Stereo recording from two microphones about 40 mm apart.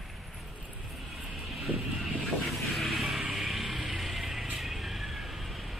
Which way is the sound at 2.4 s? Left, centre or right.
Centre.